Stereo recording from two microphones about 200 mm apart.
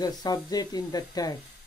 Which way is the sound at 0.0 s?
20° left (ahead or behind).